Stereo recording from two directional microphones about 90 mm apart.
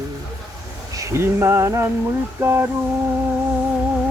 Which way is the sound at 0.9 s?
35° right (ahead or behind).